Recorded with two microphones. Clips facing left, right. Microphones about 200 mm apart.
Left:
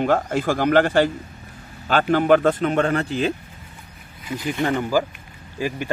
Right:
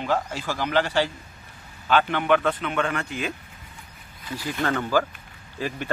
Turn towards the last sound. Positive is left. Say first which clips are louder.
# left 4 dB
turn(degrees=10)  # may be behind; listen again after turning